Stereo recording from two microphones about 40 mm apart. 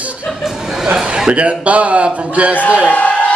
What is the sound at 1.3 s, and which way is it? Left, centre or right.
Speech, right.